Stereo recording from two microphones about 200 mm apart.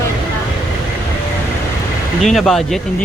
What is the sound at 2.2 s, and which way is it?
Speech, centre (ahead or behind).